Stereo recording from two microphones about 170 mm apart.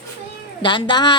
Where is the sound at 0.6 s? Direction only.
30° left (ahead or behind).